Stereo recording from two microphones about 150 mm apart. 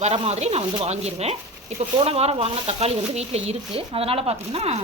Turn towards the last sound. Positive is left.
turn(degrees=-45)  # may be behind; listen again after turning